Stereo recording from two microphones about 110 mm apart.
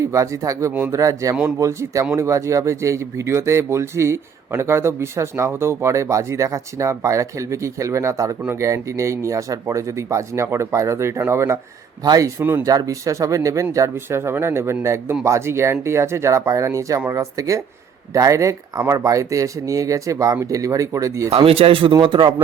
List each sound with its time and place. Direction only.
0.0 s speech: 30° right (ahead or behind)
12.4 s speech: 15° right (ahead or behind)
12.6 s speech: 30° right (ahead or behind)
21.2 s speech: 60° right (ahead or behind)